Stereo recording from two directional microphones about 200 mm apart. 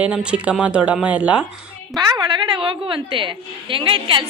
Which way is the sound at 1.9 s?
20° right (ahead or behind).